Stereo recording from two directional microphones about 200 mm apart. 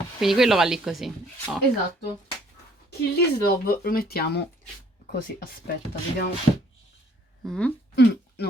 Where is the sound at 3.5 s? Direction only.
50° left (ahead or behind).